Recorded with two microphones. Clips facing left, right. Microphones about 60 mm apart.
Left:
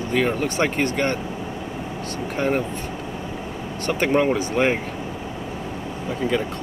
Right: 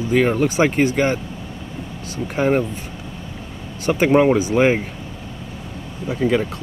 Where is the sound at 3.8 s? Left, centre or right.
Centre.